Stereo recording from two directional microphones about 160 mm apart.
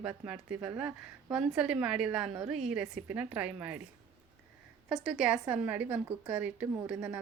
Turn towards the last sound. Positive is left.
turn(degrees=-10)  # may be behind; listen again after turning